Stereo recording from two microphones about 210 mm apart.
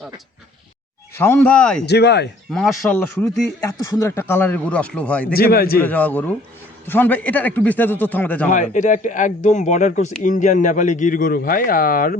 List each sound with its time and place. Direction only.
1.1 s speech: 10° left (ahead or behind)
1.9 s a man's voice: 55° left (ahead or behind)
2.8 s speech: 5° left (ahead or behind)
5.3 s a man's voice: 45° left (ahead or behind)
5.8 s speech: 10° left (ahead or behind)
8.4 s a man's voice: 35° left (ahead or behind)